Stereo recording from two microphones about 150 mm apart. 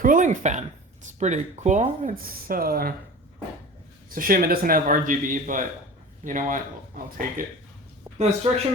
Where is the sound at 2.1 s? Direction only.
80° right.